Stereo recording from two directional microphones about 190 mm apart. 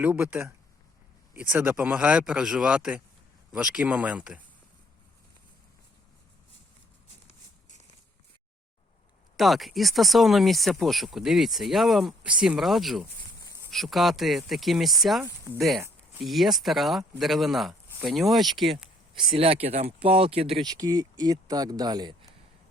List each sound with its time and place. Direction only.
0.0 s speech: 10° right (ahead or behind)
7.3 s a sound: 35° left (ahead or behind)
9.4 s speech: centre (ahead or behind)
19.2 s speech: 30° right (ahead or behind)